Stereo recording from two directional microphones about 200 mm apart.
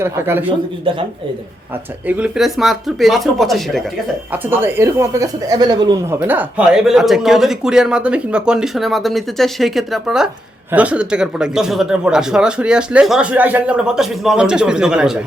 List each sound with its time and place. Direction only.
0.0 s speech: 10° right (ahead or behind)
2.0 s speech: 5° right (ahead or behind)
4.3 s speech: 10° right (ahead or behind)
6.1 s speech: 10° right (ahead or behind)